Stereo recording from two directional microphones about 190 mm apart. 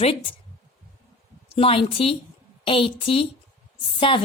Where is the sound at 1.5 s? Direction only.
30° left (ahead or behind).